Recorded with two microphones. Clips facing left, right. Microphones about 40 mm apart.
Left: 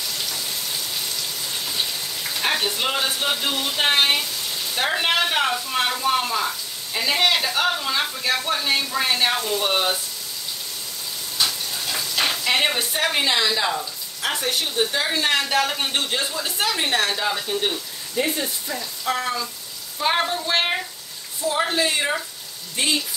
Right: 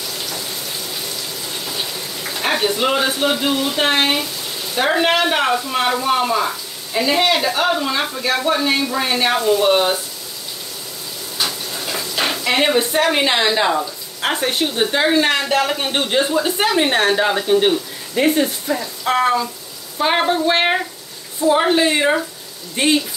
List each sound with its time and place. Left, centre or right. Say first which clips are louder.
1.8 s frying: right 1 dB; centre
2.4 s speech: right 5 dB; centre
6.9 s speech: right 4 dB; centre
11.4 s bathtub: right 2 dB; right
13.2 s a woman's voice: right 5 dB; right
16.0 s speech: right 8 dB; right
20.0 s a woman's voice: right 5 dB; right